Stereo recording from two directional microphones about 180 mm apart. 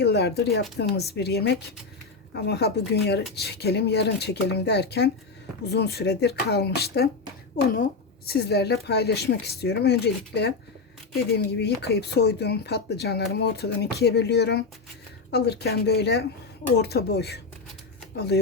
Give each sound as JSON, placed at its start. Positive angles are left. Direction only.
{"t": 0.0, "sound": "speech", "side_deg": 65}
{"t": 8.3, "sound": "speech", "side_deg": 65}
{"t": 11.6, "sound": "speech", "side_deg": 65}